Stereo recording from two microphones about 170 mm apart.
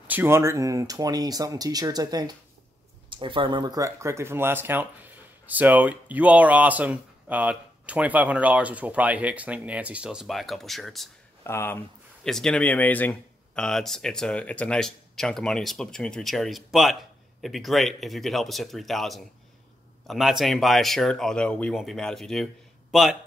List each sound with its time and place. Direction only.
0.0 s speech: 10° right (ahead or behind)
11.4 s speech: 15° left (ahead or behind)
12.3 s speech: 5° left (ahead or behind)